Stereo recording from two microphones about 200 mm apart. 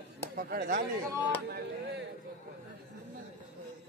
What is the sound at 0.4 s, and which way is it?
Speech, 45° right (ahead or behind).